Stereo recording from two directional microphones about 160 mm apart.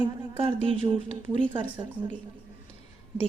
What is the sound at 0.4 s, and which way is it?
Speech, 35° right (ahead or behind).